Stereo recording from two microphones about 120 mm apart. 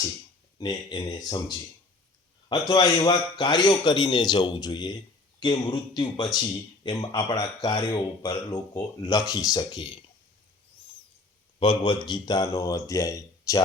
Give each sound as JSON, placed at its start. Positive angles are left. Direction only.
{"t": 0.6, "sound": "a man's voice", "side_deg": 40}
{"t": 11.9, "sound": "speech", "side_deg": 35}